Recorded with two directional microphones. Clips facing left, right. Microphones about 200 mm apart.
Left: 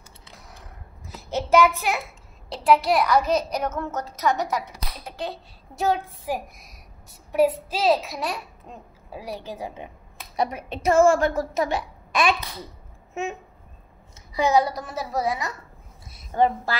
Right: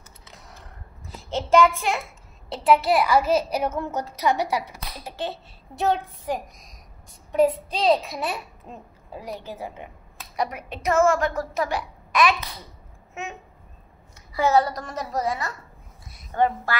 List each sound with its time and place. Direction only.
0.6 s a sound: 10° left (ahead or behind)
2.5 s a child's voice: centre (ahead or behind)
9.2 s a woman's voice: 10° left (ahead or behind)
10.3 s a woman's voice: 25° left (ahead or behind)
14.3 s a woman's voice: 15° left (ahead or behind)